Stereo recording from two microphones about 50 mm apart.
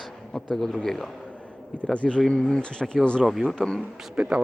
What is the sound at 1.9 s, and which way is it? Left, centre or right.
A man's voice, left.